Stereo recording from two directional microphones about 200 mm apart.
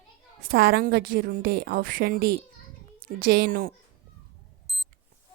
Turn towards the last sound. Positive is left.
turn(degrees=0)  # may be behind; listen again after turning